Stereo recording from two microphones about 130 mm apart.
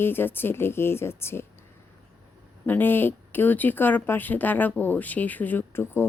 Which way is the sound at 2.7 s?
15° left (ahead or behind).